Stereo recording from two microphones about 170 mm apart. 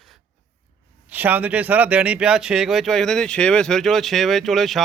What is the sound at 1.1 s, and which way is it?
Speech, 10° right (ahead or behind).